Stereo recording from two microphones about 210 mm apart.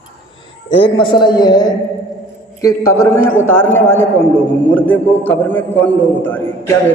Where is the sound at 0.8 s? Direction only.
25° left (ahead or behind).